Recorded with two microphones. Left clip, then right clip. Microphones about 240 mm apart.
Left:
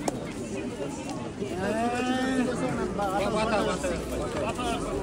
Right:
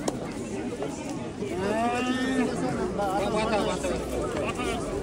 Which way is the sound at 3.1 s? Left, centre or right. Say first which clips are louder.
Left 1 dB; centre.